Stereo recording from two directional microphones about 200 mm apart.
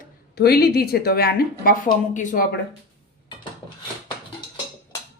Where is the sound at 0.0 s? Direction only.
50° left (ahead or behind).